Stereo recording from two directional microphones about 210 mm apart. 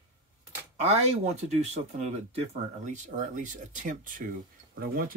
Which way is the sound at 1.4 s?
30° right (ahead or behind).